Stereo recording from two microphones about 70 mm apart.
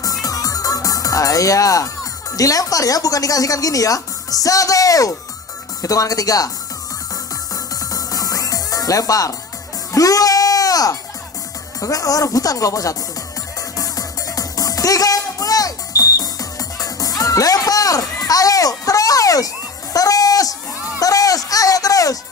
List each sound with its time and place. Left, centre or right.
0.0 s music: left
2.3 s speech: left
7.9 s music: left
9.9 s sheep: left
11.8 s speech: left
13.7 s music: left
21.0 s a sound: left